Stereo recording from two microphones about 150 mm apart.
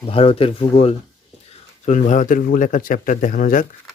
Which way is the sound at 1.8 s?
55° left (ahead or behind).